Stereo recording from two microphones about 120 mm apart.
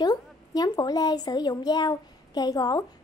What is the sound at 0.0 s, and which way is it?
A woman's voice, 35° left (ahead or behind).